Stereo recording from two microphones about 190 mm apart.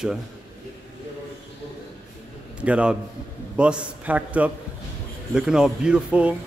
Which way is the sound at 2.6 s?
5° right (ahead or behind).